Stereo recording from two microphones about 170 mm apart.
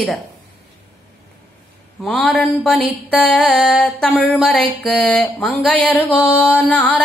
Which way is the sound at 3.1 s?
10° left (ahead or behind).